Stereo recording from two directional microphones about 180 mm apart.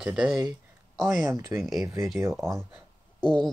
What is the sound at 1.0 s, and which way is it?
Speech, 15° right (ahead or behind).